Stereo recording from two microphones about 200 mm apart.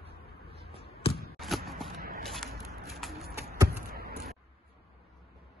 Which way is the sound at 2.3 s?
Centre (ahead or behind).